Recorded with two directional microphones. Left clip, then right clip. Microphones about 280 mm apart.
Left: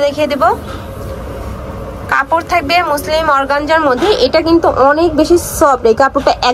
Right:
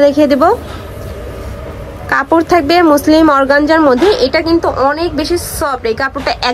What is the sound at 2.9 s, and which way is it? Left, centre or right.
A woman's voice, right.